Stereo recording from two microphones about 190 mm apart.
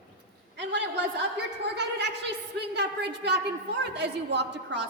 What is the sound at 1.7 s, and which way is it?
A woman's voice, 65° right (ahead or behind).